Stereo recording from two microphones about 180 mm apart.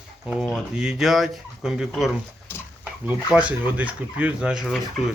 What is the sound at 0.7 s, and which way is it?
Speech, 5° right (ahead or behind).